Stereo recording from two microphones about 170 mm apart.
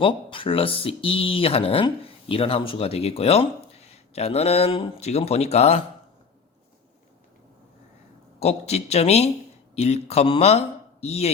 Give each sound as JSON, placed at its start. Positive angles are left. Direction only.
{"t": 0.0, "sound": "speech", "side_deg": 30}
{"t": 8.4, "sound": "speech", "side_deg": 40}